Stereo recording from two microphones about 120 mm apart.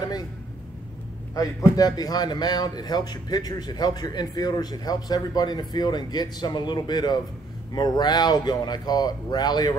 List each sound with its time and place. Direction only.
1.8 s a man's voice: 30° left (ahead or behind)